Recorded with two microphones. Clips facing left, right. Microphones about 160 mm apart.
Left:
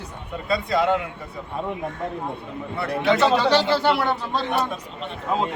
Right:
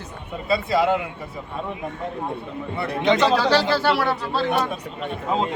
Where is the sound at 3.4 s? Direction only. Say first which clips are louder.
Even; 20° left (ahead or behind).